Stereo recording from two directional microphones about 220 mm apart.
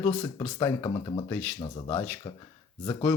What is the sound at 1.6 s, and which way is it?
Speech, 20° left (ahead or behind).